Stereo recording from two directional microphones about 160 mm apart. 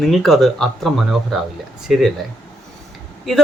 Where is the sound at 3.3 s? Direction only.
Centre (ahead or behind).